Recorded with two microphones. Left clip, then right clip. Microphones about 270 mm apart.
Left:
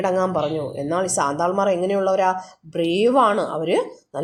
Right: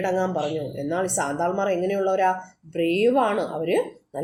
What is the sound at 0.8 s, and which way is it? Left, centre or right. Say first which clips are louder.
Speech: left 4 dB; left.